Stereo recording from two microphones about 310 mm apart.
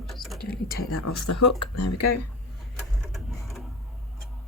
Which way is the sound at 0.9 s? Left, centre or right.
Left.